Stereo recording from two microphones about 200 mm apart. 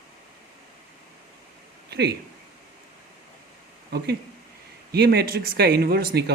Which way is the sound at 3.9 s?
55° right (ahead or behind).